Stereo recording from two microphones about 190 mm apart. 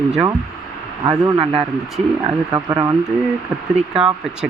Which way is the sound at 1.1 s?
20° right (ahead or behind).